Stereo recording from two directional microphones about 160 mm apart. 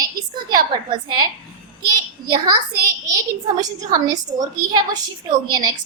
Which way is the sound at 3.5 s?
25° right (ahead or behind).